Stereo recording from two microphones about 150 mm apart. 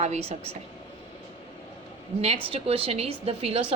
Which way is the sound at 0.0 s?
45° right (ahead or behind).